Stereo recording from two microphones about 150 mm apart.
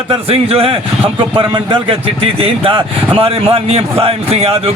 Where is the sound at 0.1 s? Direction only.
40° right (ahead or behind).